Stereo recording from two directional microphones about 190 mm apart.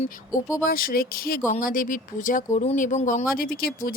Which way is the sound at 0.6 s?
50° left (ahead or behind).